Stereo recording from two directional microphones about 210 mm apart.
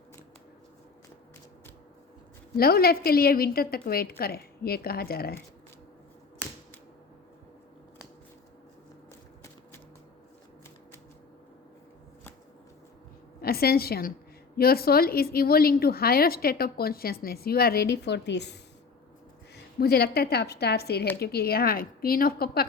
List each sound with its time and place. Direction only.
2.6 s a woman's voice: 45° left (ahead or behind)
13.4 s a woman's voice: 45° left (ahead or behind)
19.8 s a woman's voice: 50° left (ahead or behind)